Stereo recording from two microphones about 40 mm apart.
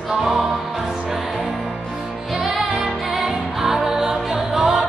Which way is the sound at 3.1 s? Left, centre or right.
Centre.